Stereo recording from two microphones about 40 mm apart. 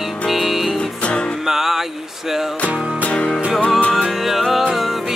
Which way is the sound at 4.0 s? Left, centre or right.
Centre.